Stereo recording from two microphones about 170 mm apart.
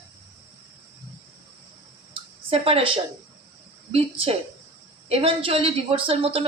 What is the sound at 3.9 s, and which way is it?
A woman's voice, 35° right (ahead or behind).